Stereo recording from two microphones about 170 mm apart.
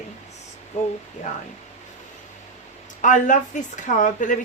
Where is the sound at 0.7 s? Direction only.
45° left (ahead or behind).